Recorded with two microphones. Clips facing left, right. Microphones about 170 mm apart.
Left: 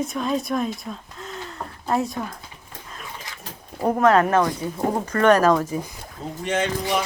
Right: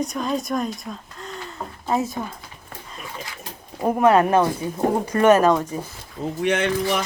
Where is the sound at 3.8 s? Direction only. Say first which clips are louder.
Right 1 dB; 10° right (ahead or behind).